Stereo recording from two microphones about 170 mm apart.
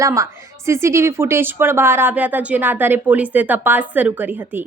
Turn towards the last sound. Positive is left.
turn(degrees=-10)  # may be behind; listen again after turning